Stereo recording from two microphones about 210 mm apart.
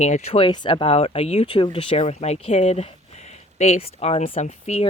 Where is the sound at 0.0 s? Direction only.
30° left (ahead or behind).